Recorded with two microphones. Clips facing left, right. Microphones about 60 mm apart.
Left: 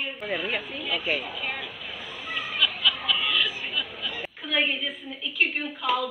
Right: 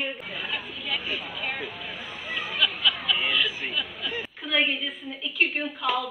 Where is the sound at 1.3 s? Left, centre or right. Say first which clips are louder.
Even; centre.